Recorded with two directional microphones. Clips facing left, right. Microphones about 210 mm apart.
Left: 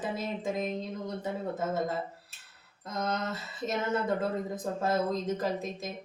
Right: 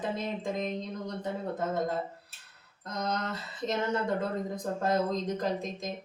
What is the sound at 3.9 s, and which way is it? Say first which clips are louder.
Speech: left 1 dB; 5° left (ahead or behind).